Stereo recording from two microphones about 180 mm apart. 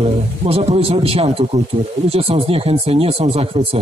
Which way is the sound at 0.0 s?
35° right (ahead or behind).